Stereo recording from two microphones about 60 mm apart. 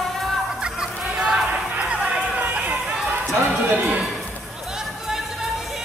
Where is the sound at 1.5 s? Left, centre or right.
Centre.